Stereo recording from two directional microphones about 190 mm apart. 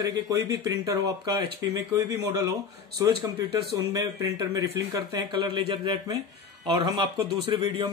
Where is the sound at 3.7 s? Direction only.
20° right (ahead or behind).